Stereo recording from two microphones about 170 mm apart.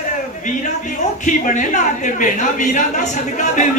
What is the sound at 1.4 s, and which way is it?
Speech, 50° left (ahead or behind).